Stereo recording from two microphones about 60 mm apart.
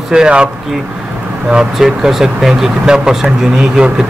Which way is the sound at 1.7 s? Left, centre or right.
Centre.